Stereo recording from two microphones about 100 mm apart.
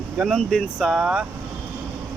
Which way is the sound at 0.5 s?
Centre (ahead or behind).